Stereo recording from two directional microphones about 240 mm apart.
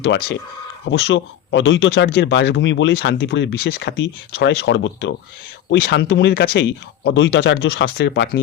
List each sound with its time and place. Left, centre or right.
0.0 s speech: left